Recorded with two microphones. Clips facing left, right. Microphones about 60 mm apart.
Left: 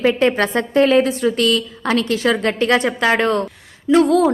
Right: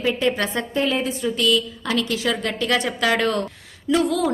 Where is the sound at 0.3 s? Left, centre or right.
Left.